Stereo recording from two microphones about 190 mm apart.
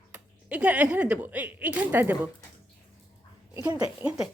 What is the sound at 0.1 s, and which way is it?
Speech, 5° right (ahead or behind).